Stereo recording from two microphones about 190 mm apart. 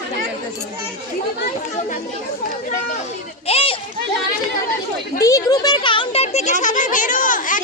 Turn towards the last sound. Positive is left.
turn(degrees=45)  # may be behind; listen again after turning